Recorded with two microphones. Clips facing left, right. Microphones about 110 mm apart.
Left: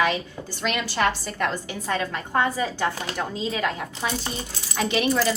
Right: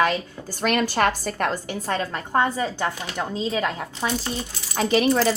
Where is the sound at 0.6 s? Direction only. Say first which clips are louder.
Right 3 dB; 50° right (ahead or behind).